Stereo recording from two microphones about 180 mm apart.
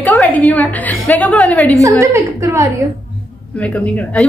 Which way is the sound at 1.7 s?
20° right (ahead or behind).